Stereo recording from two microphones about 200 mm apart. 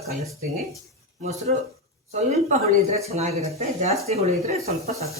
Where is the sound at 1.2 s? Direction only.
30° right (ahead or behind).